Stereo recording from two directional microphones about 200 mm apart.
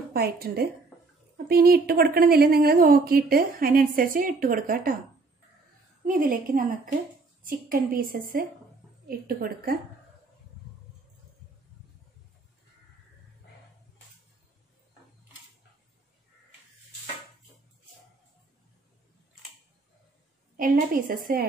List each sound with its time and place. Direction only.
0.1 s a woman's voice: 50° right (ahead or behind)
6.0 s a woman's voice: 40° right (ahead or behind)
20.5 s a woman's voice: 45° right (ahead or behind)